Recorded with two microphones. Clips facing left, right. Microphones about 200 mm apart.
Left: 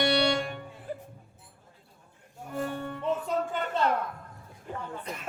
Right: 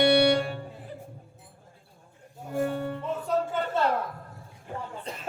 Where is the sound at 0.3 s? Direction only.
35° right (ahead or behind).